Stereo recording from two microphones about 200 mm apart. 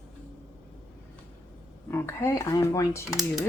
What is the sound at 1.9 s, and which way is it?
Speech, 10° left (ahead or behind).